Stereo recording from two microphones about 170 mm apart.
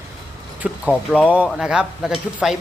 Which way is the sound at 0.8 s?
10° left (ahead or behind).